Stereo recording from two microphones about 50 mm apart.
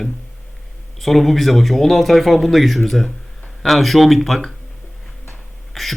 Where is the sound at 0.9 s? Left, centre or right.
Centre.